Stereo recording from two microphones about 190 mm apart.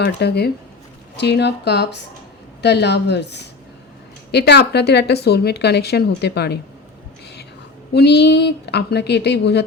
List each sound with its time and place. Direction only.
0.0 s a woman's voice: 60° left (ahead or behind)
7.9 s a woman's voice: 60° left (ahead or behind)